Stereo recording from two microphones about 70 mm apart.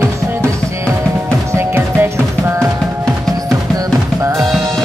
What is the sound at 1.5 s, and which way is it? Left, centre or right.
Music, right.